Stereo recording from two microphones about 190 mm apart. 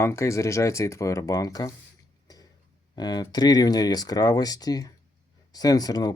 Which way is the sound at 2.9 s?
20° left (ahead or behind).